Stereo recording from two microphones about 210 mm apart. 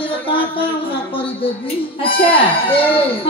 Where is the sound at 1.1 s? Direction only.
25° left (ahead or behind).